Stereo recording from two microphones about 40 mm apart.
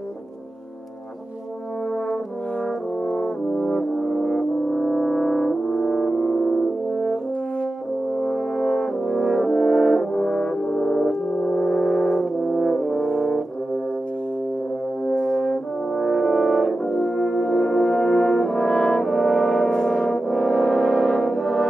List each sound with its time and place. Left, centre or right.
3.5 s brass instrument: centre
6.1 s music: centre
8.2 s brass instrument: centre
10.7 s music: centre
11.5 s gong: centre
12.4 s brass instrument: centre
15.1 s brass instrument: centre